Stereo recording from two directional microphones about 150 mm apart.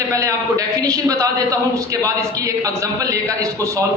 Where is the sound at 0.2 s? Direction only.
20° right (ahead or behind).